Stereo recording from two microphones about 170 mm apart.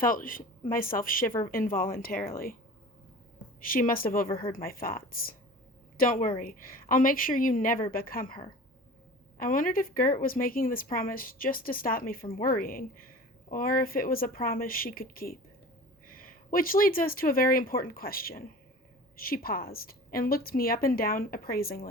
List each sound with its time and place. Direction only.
0.0 s speech: 55° left (ahead or behind)
3.3 s a woman's voice: 55° left (ahead or behind)
9.4 s speech: 55° left (ahead or behind)